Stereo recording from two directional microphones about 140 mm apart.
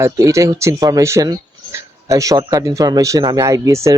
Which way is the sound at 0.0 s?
20° right (ahead or behind).